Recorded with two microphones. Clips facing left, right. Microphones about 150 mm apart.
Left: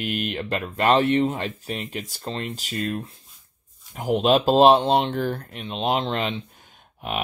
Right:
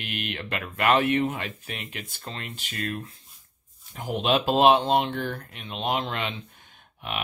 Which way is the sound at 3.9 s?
45° left (ahead or behind).